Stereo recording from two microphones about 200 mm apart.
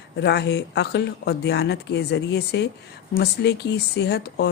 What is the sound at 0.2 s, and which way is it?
Speech, 55° left (ahead or behind).